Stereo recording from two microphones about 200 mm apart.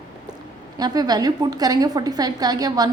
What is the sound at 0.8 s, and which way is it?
A woman's voice, 20° right (ahead or behind).